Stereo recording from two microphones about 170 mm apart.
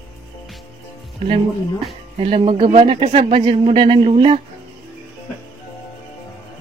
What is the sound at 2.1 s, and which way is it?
Speech, 35° right (ahead or behind).